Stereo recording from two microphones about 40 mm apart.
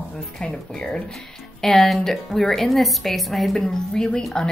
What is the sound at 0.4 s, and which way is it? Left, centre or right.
Speech, left.